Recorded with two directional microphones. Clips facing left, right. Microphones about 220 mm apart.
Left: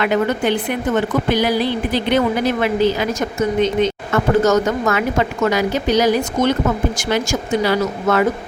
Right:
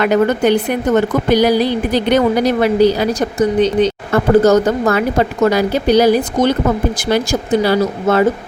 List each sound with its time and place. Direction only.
0.0 s speech: 40° right (ahead or behind)